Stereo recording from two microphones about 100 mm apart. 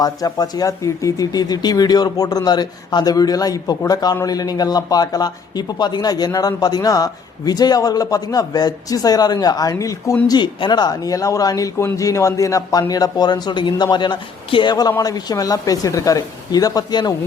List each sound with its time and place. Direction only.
0.0 s speech: 40° left (ahead or behind)
10.2 s a man's voice: 50° left (ahead or behind)